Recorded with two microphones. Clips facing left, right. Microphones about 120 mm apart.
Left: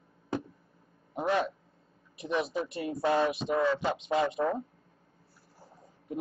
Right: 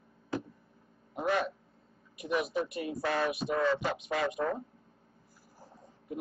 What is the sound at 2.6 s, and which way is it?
Speech, 25° left (ahead or behind).